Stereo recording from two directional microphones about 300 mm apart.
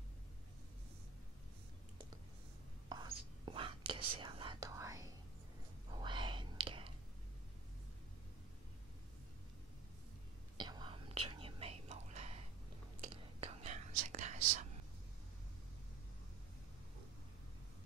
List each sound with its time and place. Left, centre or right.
2.9 s whispering: centre
10.6 s whispering: centre